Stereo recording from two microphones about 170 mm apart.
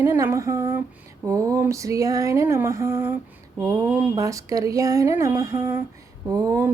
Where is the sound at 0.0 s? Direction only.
15° right (ahead or behind).